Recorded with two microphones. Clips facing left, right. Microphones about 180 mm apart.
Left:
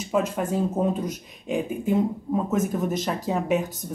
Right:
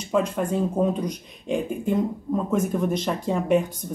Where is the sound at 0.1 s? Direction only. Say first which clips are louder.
Right 1 dB; 5° left (ahead or behind).